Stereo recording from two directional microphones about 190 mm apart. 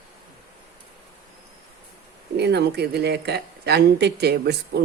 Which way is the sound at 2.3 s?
60° right (ahead or behind).